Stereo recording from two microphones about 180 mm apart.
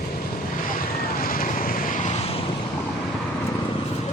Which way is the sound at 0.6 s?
50° left (ahead or behind).